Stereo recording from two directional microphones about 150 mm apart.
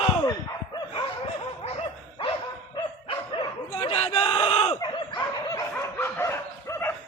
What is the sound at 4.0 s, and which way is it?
Crowd, 40° left (ahead or behind).